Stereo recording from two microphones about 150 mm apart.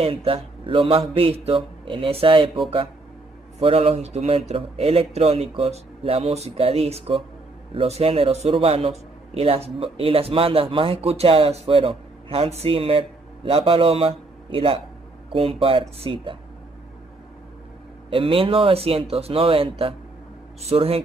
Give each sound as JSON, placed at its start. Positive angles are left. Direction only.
{"t": 0.0, "sound": "speech", "side_deg": -40}
{"t": 18.1, "sound": "speech", "side_deg": -35}